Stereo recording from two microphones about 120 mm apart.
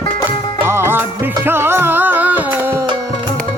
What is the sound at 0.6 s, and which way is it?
Music, 20° right (ahead or behind).